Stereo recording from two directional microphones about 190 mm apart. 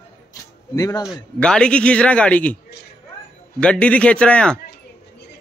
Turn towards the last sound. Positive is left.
turn(degrees=5)  # may be behind; listen again after turning